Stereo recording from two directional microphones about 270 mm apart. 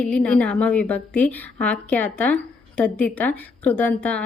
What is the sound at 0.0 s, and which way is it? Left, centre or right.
A woman's voice, centre.